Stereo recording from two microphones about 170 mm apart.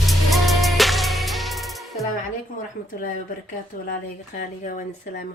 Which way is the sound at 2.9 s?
55° left (ahead or behind).